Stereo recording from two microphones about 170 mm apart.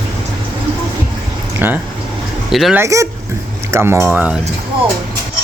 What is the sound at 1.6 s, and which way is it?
Speech, 10° right (ahead or behind).